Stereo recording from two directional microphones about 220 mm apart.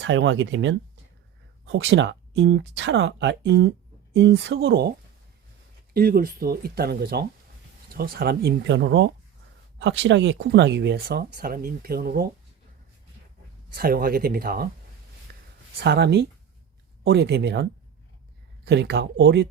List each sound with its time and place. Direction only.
0.0 s speech: 55° right (ahead or behind)
13.7 s speech: 45° right (ahead or behind)
15.3 s a sound: 45° right (ahead or behind)
15.8 s speech: 50° right (ahead or behind)